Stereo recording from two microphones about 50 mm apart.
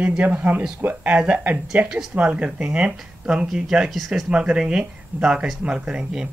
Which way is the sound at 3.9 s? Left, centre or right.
Centre.